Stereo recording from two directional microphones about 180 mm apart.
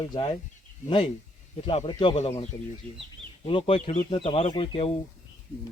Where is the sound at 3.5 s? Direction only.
30° left (ahead or behind).